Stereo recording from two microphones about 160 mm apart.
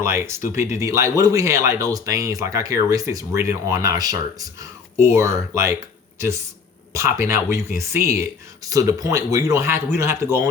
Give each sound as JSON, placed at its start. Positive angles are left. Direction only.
{"t": 0.0, "sound": "speech", "side_deg": -15}